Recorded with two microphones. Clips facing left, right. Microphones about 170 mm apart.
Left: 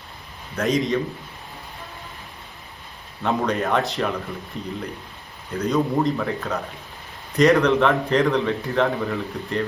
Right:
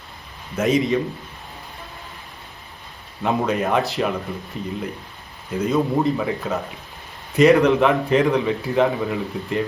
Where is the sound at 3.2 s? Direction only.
5° right (ahead or behind).